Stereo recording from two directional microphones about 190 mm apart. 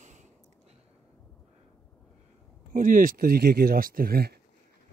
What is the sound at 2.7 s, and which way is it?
Speech, 45° right (ahead or behind).